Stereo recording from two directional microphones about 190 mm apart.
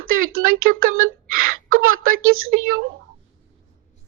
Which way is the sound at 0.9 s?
90° right.